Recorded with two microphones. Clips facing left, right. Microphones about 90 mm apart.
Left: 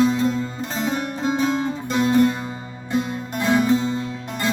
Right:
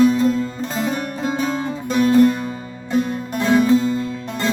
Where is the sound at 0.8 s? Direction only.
30° left (ahead or behind).